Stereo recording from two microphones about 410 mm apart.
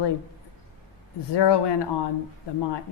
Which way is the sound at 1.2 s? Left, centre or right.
Left.